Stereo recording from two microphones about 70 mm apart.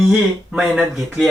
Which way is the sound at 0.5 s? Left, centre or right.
Centre.